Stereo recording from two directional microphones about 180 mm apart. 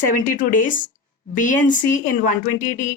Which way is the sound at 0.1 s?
50° left (ahead or behind).